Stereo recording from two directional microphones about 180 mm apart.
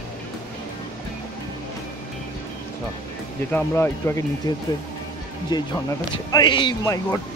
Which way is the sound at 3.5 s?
15° left (ahead or behind).